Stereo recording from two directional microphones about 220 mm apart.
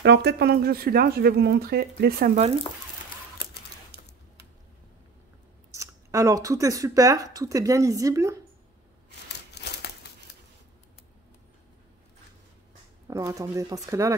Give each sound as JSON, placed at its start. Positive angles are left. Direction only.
{"t": 0.0, "sound": "speech", "side_deg": -50}
{"t": 3.9, "sound": "a sound", "side_deg": -50}
{"t": 5.7, "sound": "speech", "side_deg": -15}
{"t": 9.6, "sound": "crumpling", "side_deg": 50}
{"t": 13.1, "sound": "speech", "side_deg": -15}